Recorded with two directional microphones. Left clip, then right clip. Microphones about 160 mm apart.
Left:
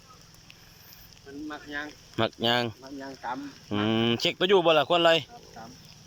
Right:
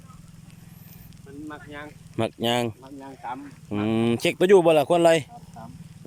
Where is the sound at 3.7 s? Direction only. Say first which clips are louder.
Right 1 dB; 15° right (ahead or behind); by 5.3 s 30° right (ahead or behind).